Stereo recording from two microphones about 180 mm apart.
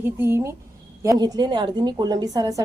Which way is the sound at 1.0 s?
20° right (ahead or behind).